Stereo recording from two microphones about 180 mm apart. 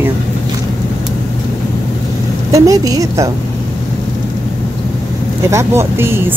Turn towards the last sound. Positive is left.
turn(degrees=-15)  # may be behind; listen again after turning